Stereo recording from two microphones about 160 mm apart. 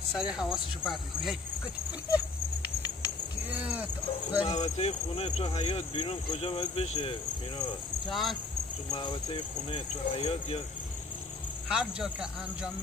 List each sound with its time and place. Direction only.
0.2 s speech: 5° right (ahead or behind)
3.4 s a sound: 10° right (ahead or behind)
4.4 s speech: 35° left (ahead or behind)
8.1 s speech: centre (ahead or behind)
8.9 s speech: 30° left (ahead or behind)
11.7 s speech: 5° right (ahead or behind)